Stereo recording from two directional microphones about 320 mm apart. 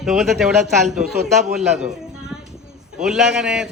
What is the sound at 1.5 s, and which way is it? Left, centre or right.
Speech, centre.